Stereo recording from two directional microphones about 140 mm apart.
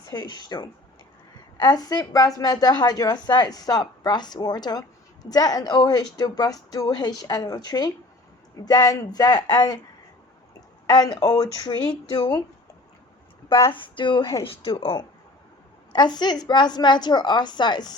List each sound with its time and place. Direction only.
0.1 s a woman's voice: 30° left (ahead or behind)
10.8 s a woman's voice: 30° left (ahead or behind)
13.7 s a woman's voice: 35° left (ahead or behind)